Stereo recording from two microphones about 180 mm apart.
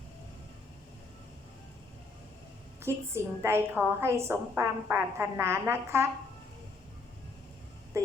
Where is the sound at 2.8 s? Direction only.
15° right (ahead or behind).